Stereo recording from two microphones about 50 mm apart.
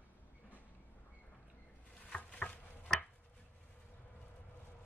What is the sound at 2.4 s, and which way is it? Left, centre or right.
Tick-tock, left.